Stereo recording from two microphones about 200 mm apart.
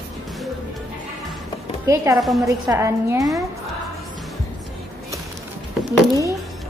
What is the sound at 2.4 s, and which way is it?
Speech, 15° right (ahead or behind).